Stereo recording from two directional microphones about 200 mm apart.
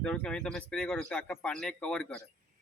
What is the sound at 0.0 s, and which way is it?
A man's voice, 5° left (ahead or behind).